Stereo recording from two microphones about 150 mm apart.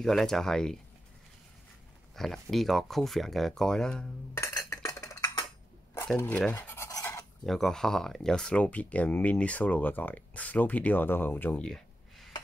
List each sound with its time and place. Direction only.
0.0 s speech: centre (ahead or behind)
2.1 s speech: centre (ahead or behind)
4.4 s dishes: 20° left (ahead or behind)
6.1 s speech: 10° left (ahead or behind)
6.6 s a sound: 15° left (ahead or behind)
7.4 s speech: centre (ahead or behind)